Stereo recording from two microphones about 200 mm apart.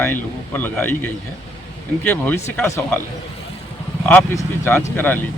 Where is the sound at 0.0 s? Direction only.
10° left (ahead or behind).